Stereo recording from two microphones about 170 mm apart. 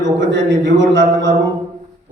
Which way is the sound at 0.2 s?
90° right.